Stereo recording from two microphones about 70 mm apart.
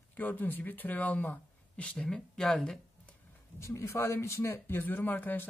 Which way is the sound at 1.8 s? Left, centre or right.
Centre.